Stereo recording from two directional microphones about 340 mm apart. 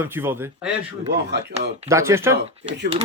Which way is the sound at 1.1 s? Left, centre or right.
Right.